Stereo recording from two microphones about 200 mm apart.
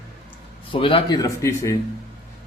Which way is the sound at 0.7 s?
25° left (ahead or behind).